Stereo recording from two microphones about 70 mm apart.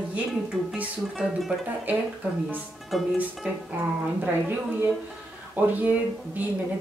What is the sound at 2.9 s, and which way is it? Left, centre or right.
Speech, centre.